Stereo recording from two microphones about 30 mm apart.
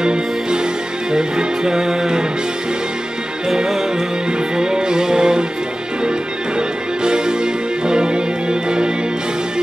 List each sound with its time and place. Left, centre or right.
0.0 s music: right
3.4 s music: centre
7.0 s music: right